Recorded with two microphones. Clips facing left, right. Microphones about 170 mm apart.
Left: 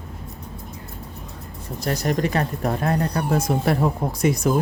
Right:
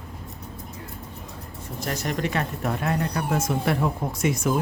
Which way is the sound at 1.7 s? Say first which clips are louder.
Left 5 dB; 35° left (ahead or behind).